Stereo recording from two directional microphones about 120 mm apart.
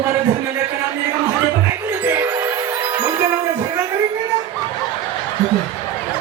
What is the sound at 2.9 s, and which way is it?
Music, 30° right (ahead or behind).